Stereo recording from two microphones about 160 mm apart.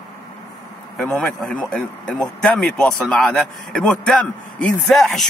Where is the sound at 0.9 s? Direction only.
5° left (ahead or behind).